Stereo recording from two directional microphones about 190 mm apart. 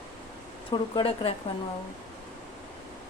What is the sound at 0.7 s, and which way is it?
Speech, 25° left (ahead or behind).